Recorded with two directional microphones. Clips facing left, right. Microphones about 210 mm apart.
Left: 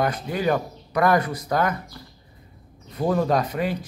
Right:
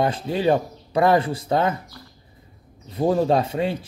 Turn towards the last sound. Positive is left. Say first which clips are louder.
# right 2 dB
turn(degrees=-25)  # may be behind; listen again after turning